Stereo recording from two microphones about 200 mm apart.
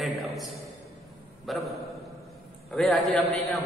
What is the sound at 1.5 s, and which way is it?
Speech, centre (ahead or behind).